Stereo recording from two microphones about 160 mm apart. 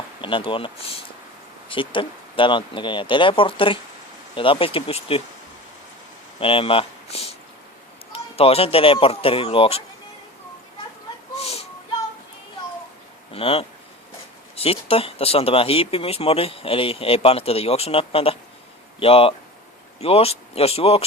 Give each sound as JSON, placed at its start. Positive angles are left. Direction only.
{"t": 0.2, "sound": "speech", "side_deg": 30}
{"t": 6.4, "sound": "speech", "side_deg": 35}
{"t": 11.3, "sound": "a sound", "side_deg": 40}
{"t": 13.3, "sound": "speech", "side_deg": 35}